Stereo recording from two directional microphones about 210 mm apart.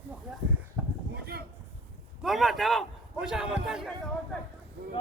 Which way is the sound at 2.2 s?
Centre (ahead or behind).